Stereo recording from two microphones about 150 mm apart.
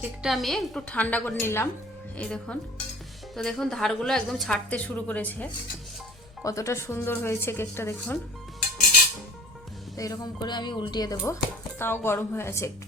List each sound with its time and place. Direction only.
0.0 s a woman's voice: 5° right (ahead or behind)
6.4 s speech: 20° left (ahead or behind)
10.0 s speech: 25° left (ahead or behind)